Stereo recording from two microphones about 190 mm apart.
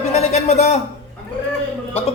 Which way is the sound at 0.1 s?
35° left (ahead or behind).